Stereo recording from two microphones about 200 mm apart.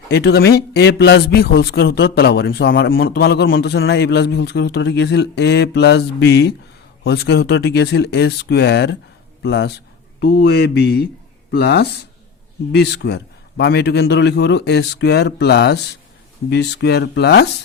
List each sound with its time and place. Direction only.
0.1 s a man's voice: 55° left (ahead or behind)
3.5 s a man's voice: 65° left (ahead or behind)